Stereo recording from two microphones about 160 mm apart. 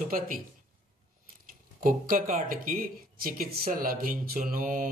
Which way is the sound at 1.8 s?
60° right (ahead or behind).